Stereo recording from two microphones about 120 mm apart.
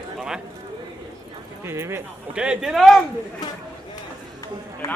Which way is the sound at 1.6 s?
20° right (ahead or behind).